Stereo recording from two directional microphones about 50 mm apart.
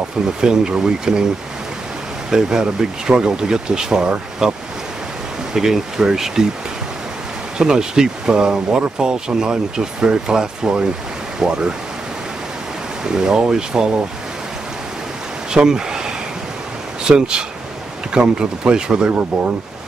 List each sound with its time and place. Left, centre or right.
0.4 s speech: centre
2.3 s speech: centre
5.5 s speech: centre
7.5 s speech: centre
13.1 s speech: centre
15.5 s a sound: centre
17.0 s speech: centre